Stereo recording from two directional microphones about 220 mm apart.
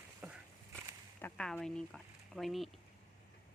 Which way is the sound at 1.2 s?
5° left (ahead or behind).